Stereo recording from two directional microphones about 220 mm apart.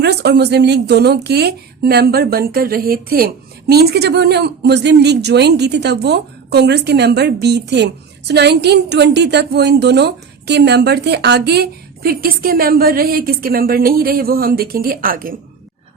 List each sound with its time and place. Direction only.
0.0 s a woman's voice: 50° right (ahead or behind)